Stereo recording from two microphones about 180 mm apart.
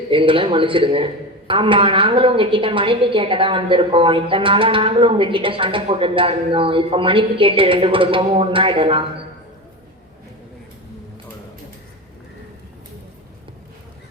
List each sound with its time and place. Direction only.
0.1 s a man's voice: 30° right (ahead or behind)